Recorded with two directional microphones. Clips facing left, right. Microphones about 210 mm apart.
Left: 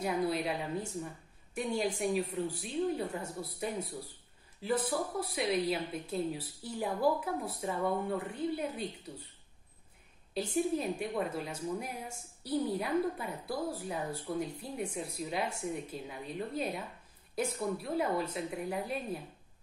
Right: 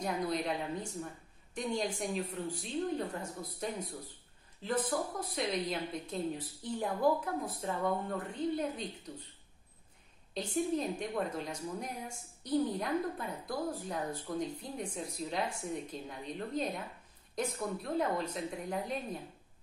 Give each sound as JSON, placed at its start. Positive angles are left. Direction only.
{"t": 0.0, "sound": "a woman's voice", "side_deg": 5}
{"t": 10.3, "sound": "a woman's voice", "side_deg": 10}